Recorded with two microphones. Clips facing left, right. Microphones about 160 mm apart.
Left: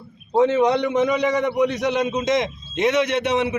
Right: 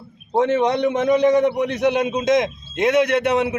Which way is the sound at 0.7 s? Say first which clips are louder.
Right 2 dB; 50° right (ahead or behind).